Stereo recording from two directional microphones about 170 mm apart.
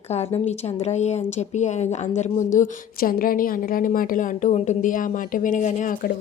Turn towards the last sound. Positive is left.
turn(degrees=50)  # may be behind; listen again after turning